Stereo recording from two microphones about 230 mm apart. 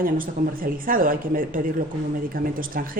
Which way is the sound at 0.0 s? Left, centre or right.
Right.